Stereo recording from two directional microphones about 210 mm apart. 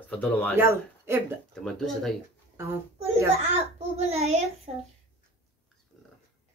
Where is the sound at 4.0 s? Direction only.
30° right (ahead or behind).